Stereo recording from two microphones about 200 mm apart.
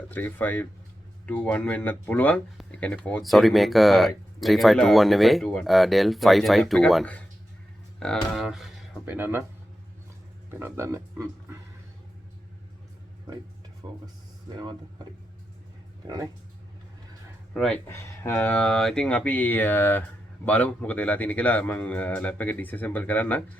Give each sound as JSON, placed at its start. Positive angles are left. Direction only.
{"t": 0.1, "sound": "speech", "side_deg": 10}
{"t": 10.5, "sound": "speech", "side_deg": -10}
{"t": 13.8, "sound": "speech", "side_deg": -20}
{"t": 17.5, "sound": "speech", "side_deg": 0}